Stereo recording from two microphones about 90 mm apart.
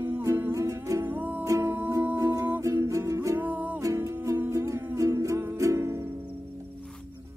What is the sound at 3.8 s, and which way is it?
Music, 35° right (ahead or behind).